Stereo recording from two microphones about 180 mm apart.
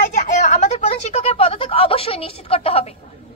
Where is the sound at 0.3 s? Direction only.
40° left (ahead or behind).